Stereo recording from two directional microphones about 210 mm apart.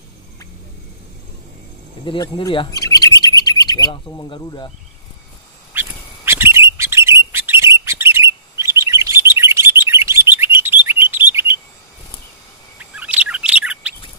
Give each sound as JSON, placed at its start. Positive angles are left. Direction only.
{"t": 2.0, "sound": "chirp", "side_deg": 20}
{"t": 5.7, "sound": "duck", "side_deg": -10}
{"t": 6.8, "sound": "bird", "side_deg": -15}
{"t": 12.7, "sound": "bird", "side_deg": -5}